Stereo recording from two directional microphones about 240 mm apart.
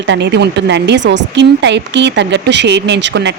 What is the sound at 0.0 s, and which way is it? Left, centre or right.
Speech, right.